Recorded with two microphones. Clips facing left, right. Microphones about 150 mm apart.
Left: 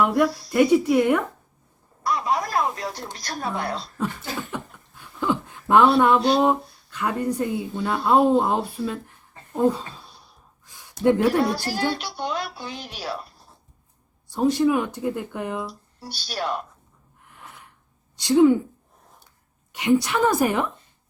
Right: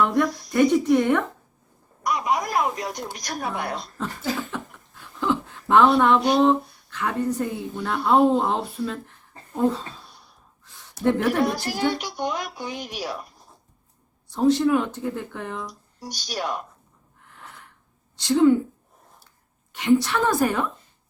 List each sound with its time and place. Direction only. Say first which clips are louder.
0.0 s speech: left 1 dB; 10° left (ahead or behind)
2.0 s speech: even; 15° right (ahead or behind)
5.2 s a sound: even; 15° left (ahead or behind)
6.3 s speech: right 1 dB; 10° left (ahead or behind)
11.0 s speech: left 2 dB; 15° left (ahead or behind)
11.5 s speech: right 1 dB; 15° right (ahead or behind)
14.3 s speech: right 1 dB; 10° left (ahead or behind)
16.0 s speech: even; 15° right (ahead or behind)
17.4 s a sound: even; 15° left (ahead or behind)
18.2 s speech: left 2 dB; 15° left (ahead or behind)
19.7 s speech: even; 15° left (ahead or behind)